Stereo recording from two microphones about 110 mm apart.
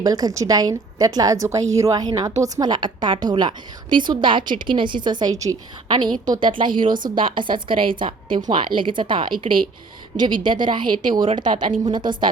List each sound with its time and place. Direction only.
0.0 s a woman's voice: 35° right (ahead or behind)